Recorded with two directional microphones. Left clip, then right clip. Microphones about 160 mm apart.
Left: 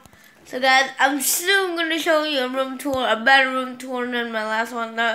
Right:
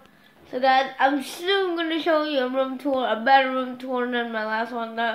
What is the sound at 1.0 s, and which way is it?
Speech, centre (ahead or behind).